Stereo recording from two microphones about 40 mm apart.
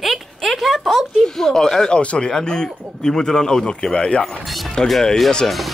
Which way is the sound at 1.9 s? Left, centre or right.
Left.